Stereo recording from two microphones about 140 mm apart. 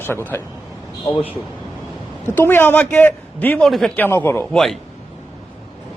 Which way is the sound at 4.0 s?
15° left (ahead or behind).